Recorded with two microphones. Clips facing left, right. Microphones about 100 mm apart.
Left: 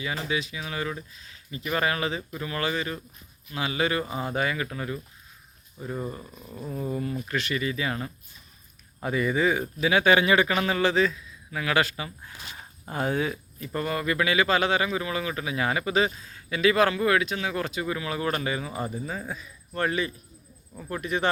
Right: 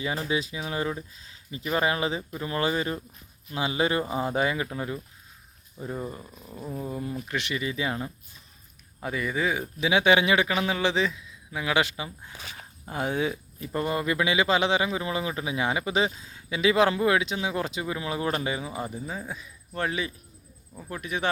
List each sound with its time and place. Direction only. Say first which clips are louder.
0.3 s speech: right 2 dB; 30° right (ahead or behind)
6.0 s speech: left 1 dB; centre (ahead or behind); by 8.1 s 15° right (ahead or behind)
9.0 s speech: left 4 dB; centre (ahead or behind)